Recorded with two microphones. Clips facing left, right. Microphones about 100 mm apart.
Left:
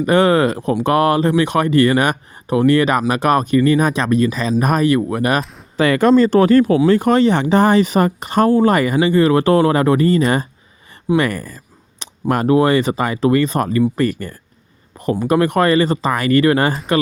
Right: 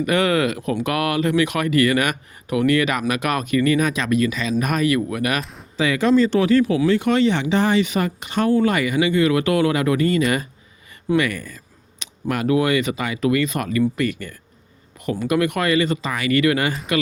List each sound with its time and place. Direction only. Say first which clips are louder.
0.0 s speech: left 5 dB; 35° left (ahead or behind)
5.4 s speech: left 5 dB; centre (ahead or behind)
5.7 s speech: left 5 dB; 55° left (ahead or behind); by 16.7 s 35° left (ahead or behind)